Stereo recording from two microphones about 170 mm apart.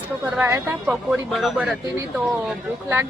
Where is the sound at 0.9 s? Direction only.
Centre (ahead or behind).